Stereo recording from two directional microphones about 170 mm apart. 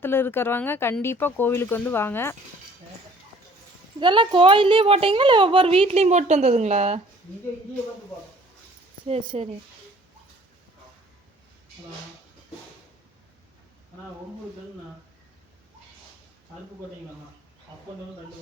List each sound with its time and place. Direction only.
0.0 s speech: 15° left (ahead or behind)
4.0 s a woman's voice: 25° right (ahead or behind)
9.0 s a woman's voice: 35° right (ahead or behind)